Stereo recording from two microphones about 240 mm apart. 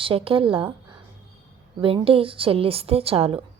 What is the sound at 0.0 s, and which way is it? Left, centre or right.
Speech, right.